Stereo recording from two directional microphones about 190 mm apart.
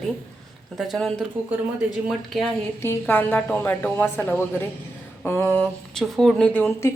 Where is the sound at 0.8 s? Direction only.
Centre (ahead or behind).